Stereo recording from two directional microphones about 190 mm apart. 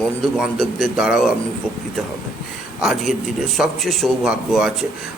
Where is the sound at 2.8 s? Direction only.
Centre (ahead or behind).